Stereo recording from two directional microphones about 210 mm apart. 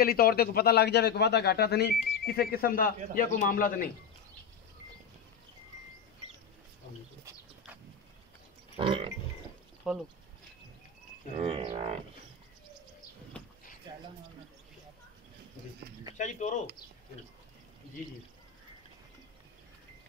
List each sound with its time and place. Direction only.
0.0 s a man's voice: 45° left (ahead or behind)
7.2 s bird: 5° right (ahead or behind)
8.7 s a sound: 25° right (ahead or behind)
9.9 s speech: centre (ahead or behind)
11.3 s a sound: 25° right (ahead or behind)
16.2 s a man's voice: 35° left (ahead or behind)